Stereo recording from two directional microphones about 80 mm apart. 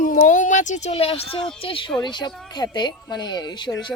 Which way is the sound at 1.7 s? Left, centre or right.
Left.